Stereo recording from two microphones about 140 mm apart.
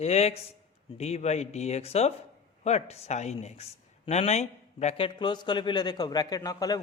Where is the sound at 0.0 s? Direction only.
50° left (ahead or behind).